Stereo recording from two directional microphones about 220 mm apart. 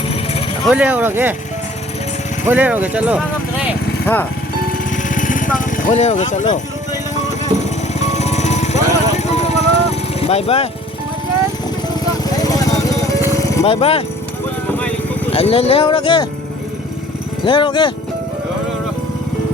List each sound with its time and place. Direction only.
0.7 s speech: 5° right (ahead or behind)
2.5 s speech: 10° right (ahead or behind)
4.0 s speech: 10° left (ahead or behind)
5.0 s vehicle: 35° left (ahead or behind)
8.2 s music: 30° left (ahead or behind)
10.2 s speech: 25° left (ahead or behind)
12.2 s vehicle: 15° left (ahead or behind)
13.7 s speech: 25° left (ahead or behind)
14.7 s vehicle: 5° left (ahead or behind)
15.3 s speech: 25° left (ahead or behind)
17.4 s speech: 20° left (ahead or behind)